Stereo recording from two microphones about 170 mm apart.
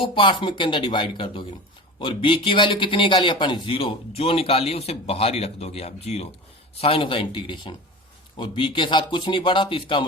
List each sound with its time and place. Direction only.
0.0 s speech: 30° left (ahead or behind)